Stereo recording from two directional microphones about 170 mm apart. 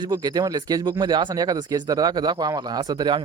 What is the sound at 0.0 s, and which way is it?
Speech, 25° right (ahead or behind).